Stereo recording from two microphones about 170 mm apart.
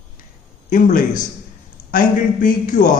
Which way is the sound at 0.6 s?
50° left (ahead or behind).